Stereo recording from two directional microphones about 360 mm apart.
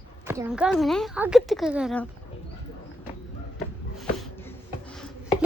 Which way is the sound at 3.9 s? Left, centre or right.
Centre.